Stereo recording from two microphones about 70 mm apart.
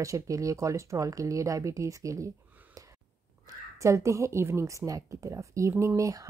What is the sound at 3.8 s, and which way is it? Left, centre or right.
Speech, right.